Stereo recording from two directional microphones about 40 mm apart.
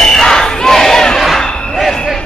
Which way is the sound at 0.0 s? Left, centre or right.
Centre.